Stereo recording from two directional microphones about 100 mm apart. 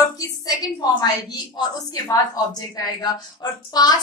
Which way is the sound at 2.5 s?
40° left (ahead or behind).